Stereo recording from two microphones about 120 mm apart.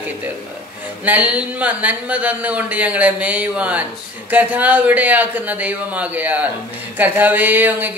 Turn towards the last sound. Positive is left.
turn(degrees=-15)  # may be behind; listen again after turning